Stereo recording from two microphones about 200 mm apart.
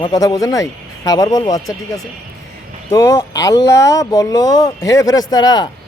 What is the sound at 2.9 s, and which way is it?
Speech, 15° left (ahead or behind).